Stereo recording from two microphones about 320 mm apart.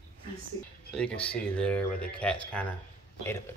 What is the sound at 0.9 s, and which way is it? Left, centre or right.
Speech, centre.